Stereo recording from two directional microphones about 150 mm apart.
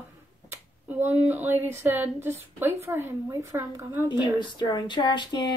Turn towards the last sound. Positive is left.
turn(degrees=30)  # may be behind; listen again after turning